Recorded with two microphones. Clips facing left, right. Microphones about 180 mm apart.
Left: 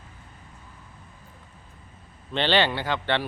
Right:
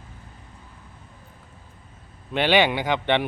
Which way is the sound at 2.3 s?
10° right (ahead or behind).